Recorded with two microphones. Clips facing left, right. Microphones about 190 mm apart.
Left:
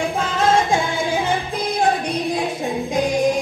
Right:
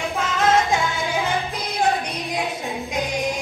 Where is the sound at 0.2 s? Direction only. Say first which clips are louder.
Even; 30° left (ahead or behind).